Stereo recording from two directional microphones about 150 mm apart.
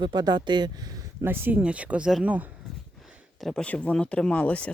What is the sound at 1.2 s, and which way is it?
Speech, 15° right (ahead or behind).